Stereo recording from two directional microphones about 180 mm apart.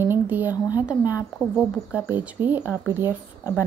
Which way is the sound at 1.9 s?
10° right (ahead or behind).